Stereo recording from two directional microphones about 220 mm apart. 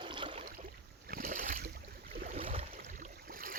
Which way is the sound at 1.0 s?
40° right (ahead or behind).